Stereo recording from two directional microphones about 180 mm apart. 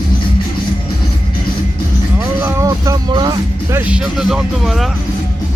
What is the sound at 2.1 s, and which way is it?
Music, 15° right (ahead or behind).